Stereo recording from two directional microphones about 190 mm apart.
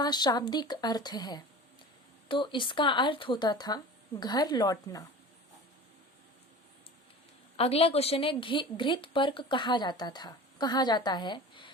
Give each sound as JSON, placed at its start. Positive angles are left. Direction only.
{"t": 0.0, "sound": "a woman's voice", "side_deg": 20}
{"t": 7.5, "sound": "a woman's voice", "side_deg": 30}